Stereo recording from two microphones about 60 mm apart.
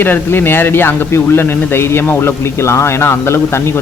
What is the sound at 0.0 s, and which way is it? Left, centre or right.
Speech, left.